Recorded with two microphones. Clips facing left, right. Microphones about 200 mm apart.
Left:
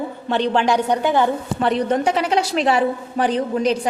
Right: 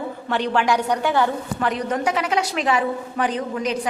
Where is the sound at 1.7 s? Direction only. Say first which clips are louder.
Left 5 dB; 30° left (ahead or behind).